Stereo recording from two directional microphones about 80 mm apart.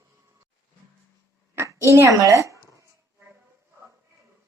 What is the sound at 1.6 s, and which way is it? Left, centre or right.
A child's voice, right.